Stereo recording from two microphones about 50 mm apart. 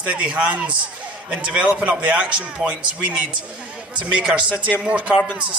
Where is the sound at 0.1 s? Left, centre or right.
Right.